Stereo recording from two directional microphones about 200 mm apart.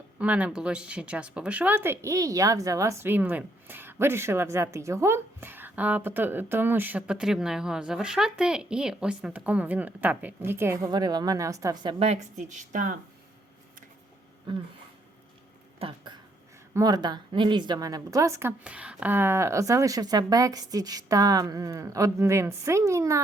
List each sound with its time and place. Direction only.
0.2 s speech: 5° right (ahead or behind); by 12.9 s 40° right (ahead or behind)
15.8 s a sound: 30° right (ahead or behind)
16.7 s speech: 20° right (ahead or behind)